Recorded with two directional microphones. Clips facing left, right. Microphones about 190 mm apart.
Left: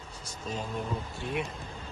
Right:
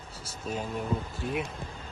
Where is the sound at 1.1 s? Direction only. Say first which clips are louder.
Right 1 dB; centre (ahead or behind).